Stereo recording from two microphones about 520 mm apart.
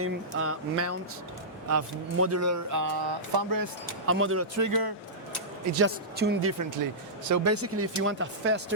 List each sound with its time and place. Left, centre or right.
0.0 s speech: right
4.0 s speech: right
5.7 s speech: right
7.3 s speech: right